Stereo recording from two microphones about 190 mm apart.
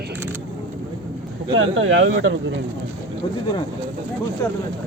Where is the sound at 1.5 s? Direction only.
90° right.